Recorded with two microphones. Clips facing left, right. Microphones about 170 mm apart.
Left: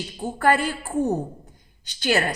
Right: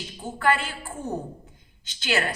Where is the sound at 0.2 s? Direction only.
40° left (ahead or behind).